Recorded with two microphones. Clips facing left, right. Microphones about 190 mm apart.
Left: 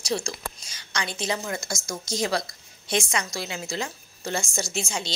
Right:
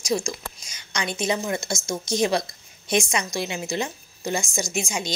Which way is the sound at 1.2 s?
20° right (ahead or behind).